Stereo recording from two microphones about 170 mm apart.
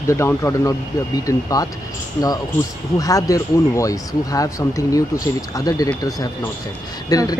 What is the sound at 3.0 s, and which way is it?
Speech, 20° left (ahead or behind).